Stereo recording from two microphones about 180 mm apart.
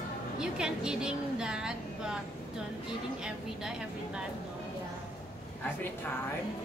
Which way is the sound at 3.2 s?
5° right (ahead or behind).